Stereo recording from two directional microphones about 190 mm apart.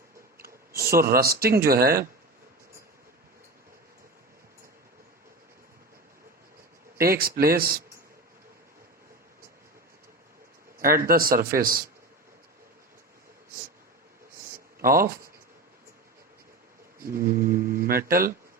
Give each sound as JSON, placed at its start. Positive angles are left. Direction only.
{"t": 0.8, "sound": "speech", "side_deg": -50}
{"t": 7.0, "sound": "speech", "side_deg": -50}
{"t": 10.8, "sound": "speech", "side_deg": -50}
{"t": 14.8, "sound": "speech", "side_deg": -50}
{"t": 17.0, "sound": "speech", "side_deg": -50}